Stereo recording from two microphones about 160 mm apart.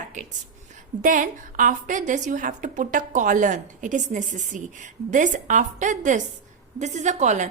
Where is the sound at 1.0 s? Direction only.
55° right (ahead or behind).